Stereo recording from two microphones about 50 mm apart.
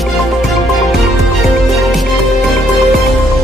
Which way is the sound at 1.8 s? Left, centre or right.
Centre.